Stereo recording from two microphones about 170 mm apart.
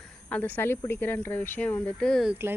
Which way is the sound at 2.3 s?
15° right (ahead or behind).